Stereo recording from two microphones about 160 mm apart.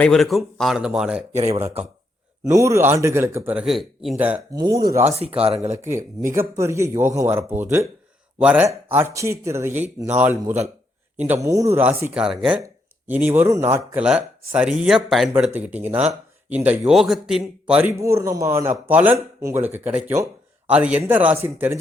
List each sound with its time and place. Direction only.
0.0 s speech: centre (ahead or behind)
1.4 s speech: 40° right (ahead or behind)
2.4 s speech: 20° right (ahead or behind)
4.5 s speech: 25° right (ahead or behind)